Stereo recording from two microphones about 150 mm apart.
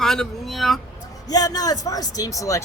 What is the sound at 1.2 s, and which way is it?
A man's voice, 25° left (ahead or behind).